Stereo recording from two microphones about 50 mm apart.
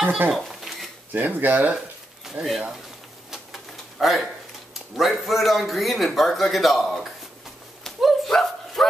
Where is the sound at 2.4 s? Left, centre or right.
Right.